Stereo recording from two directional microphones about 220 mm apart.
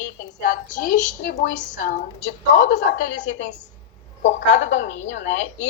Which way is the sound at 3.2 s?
55° left (ahead or behind).